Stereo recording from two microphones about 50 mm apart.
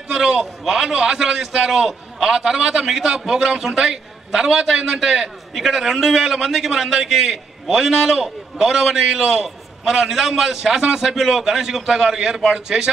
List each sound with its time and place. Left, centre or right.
0.1 s a sound: centre
0.7 s a man's voice: centre
1.7 s a man's voice: centre